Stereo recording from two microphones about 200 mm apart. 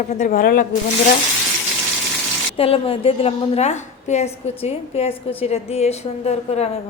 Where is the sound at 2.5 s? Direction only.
30° left (ahead or behind).